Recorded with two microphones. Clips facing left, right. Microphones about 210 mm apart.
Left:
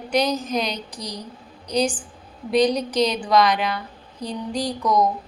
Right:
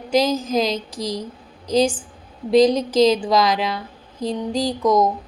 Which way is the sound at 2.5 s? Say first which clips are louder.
Right 5 dB; 25° right (ahead or behind).